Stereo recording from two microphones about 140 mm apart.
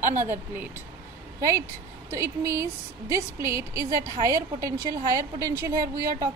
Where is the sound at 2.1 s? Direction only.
20° right (ahead or behind).